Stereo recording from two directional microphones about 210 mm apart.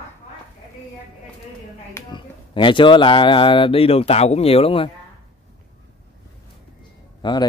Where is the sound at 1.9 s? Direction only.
20° left (ahead or behind).